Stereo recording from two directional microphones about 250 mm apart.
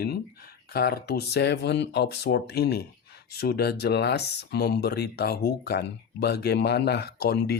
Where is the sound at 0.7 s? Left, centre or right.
Left.